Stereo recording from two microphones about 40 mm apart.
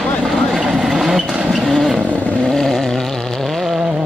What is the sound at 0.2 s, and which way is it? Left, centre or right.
Vehicle, centre.